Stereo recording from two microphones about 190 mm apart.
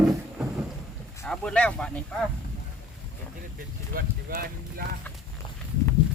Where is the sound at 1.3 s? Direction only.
5° left (ahead or behind).